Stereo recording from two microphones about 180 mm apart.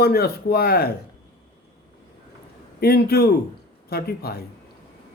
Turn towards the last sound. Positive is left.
turn(degrees=60)  # may be behind; listen again after turning